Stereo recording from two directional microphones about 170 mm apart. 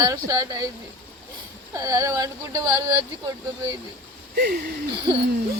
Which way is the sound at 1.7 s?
20° right (ahead or behind).